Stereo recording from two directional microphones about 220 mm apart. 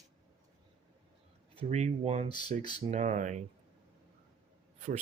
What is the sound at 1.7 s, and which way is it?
Speech, 30° right (ahead or behind).